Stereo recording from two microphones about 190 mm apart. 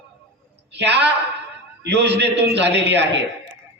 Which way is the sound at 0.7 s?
65° right (ahead or behind).